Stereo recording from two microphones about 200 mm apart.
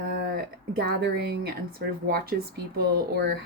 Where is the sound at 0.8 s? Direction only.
55° right (ahead or behind).